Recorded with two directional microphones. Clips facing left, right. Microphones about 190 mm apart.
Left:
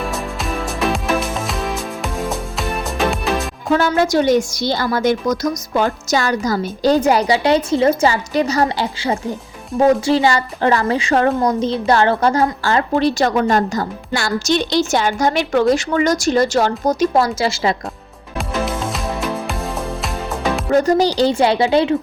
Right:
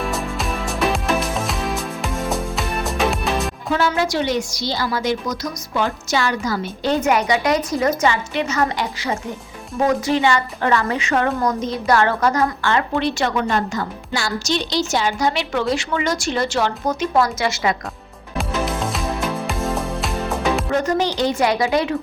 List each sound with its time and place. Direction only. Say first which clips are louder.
0.0 s music: even; centre (ahead or behind)
3.7 s a woman's voice: left 5 dB; 45° left (ahead or behind)
14.2 s a woman's voice: left 5 dB; 50° left (ahead or behind); by 17.7 s 30° left (ahead or behind)
18.3 s music: left 1 dB; centre (ahead or behind)
20.7 s a woman's voice: left 10 dB; 35° left (ahead or behind)